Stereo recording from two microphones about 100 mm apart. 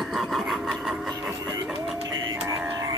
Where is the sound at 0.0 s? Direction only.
Centre (ahead or behind).